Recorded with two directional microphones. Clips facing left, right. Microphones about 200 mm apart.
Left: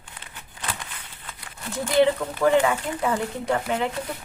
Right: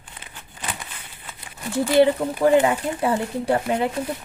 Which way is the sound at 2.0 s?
30° right (ahead or behind).